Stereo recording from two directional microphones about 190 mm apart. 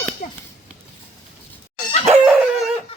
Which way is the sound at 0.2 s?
40° left (ahead or behind).